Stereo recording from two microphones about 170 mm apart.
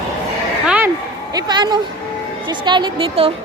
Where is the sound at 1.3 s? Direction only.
25° right (ahead or behind).